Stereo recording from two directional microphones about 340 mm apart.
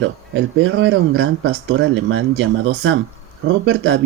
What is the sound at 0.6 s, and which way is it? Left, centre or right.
Speech, right.